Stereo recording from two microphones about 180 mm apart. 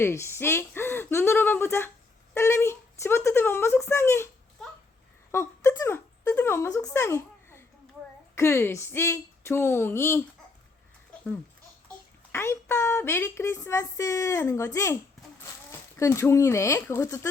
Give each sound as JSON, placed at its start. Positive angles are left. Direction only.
{"t": 0.0, "sound": "speech", "side_deg": 15}
{"t": 5.3, "sound": "speech", "side_deg": 15}
{"t": 12.3, "sound": "speech", "side_deg": 15}
{"t": 16.0, "sound": "speech", "side_deg": 15}